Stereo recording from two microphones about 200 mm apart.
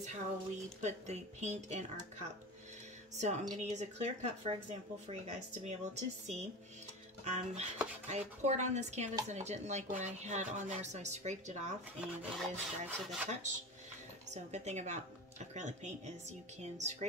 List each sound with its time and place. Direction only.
0.8 s speech: 35° right (ahead or behind)
3.2 s speech: 35° right (ahead or behind)
12.0 s rub: centre (ahead or behind)
14.3 s speech: 35° right (ahead or behind)